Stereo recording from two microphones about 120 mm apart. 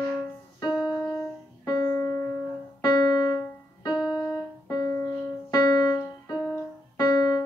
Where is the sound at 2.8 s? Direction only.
35° left (ahead or behind).